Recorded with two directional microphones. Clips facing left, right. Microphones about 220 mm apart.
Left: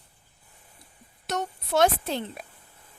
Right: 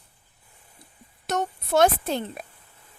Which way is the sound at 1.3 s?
50° right (ahead or behind).